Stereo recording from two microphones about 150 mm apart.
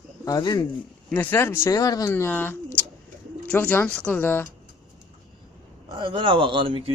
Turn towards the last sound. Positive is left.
turn(degrees=-35)  # may be behind; listen again after turning